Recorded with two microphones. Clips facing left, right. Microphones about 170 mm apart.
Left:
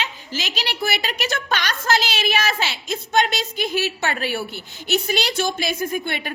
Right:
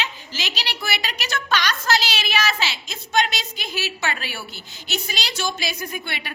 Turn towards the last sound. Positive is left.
turn(degrees=45)  # may be behind; listen again after turning